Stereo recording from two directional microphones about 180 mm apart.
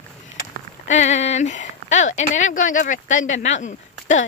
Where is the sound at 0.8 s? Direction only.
40° left (ahead or behind).